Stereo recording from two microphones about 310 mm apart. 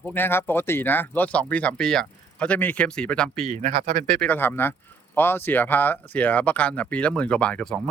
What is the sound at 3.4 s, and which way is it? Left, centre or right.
Speech, right.